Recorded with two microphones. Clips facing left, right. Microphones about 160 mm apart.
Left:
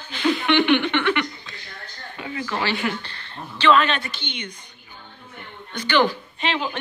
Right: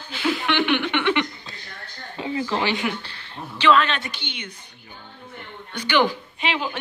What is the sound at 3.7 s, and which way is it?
Speech, 5° left (ahead or behind).